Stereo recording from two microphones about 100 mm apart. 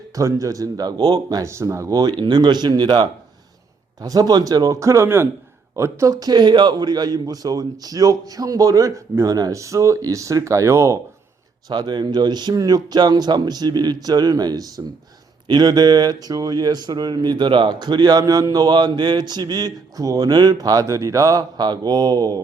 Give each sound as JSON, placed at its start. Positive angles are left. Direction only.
{"t": 0.1, "sound": "a man's voice", "side_deg": -35}
{"t": 11.7, "sound": "a man's voice", "side_deg": -50}